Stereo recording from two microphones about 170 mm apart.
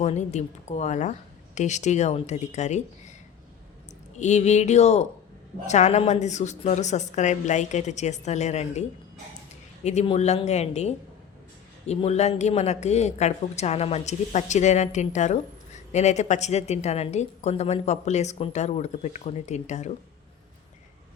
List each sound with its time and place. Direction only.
0.0 s a woman's voice: 40° left (ahead or behind)
4.2 s a woman's voice: 40° left (ahead or behind)
9.8 s a woman's voice: 40° left (ahead or behind)